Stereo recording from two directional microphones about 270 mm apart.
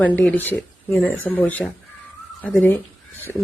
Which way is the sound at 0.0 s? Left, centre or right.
Centre.